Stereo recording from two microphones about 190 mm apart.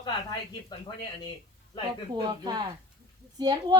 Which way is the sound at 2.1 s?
20° right (ahead or behind).